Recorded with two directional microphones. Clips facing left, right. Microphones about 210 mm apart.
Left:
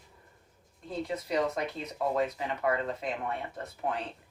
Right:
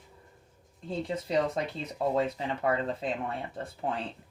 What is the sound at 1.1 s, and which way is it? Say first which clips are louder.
Speech: right 1 dB; 30° right (ahead or behind).